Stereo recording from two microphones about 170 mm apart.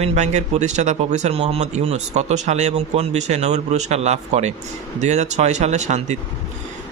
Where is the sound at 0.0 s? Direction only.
45° right (ahead or behind).